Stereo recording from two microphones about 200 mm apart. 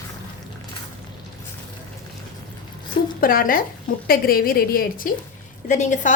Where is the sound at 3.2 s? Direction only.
45° left (ahead or behind).